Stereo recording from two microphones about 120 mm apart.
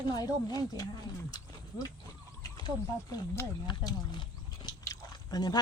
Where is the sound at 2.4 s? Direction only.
30° left (ahead or behind).